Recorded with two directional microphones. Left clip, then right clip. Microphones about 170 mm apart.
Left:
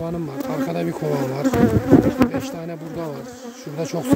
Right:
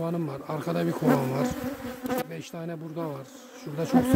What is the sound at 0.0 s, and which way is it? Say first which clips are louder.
Speech: left 5 dB; 5° left (ahead or behind).